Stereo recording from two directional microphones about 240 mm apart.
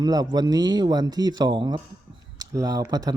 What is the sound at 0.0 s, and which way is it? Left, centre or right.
Speech, centre.